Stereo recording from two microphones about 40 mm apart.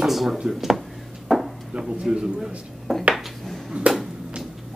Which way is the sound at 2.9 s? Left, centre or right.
Centre.